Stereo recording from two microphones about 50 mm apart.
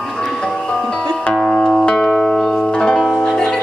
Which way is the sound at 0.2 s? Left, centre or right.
Centre.